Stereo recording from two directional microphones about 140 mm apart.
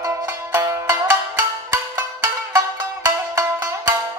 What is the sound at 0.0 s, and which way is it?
Music, 25° right (ahead or behind).